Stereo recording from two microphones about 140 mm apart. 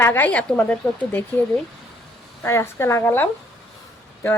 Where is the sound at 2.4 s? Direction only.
20° left (ahead or behind).